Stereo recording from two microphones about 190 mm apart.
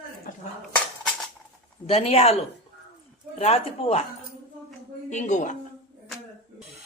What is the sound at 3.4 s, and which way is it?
Speech, 30° left (ahead or behind).